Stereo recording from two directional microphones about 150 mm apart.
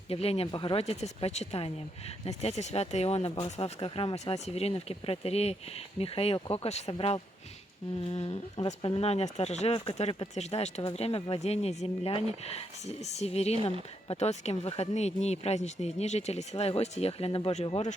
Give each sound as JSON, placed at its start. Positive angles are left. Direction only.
{"t": 0.1, "sound": "speech", "side_deg": 40}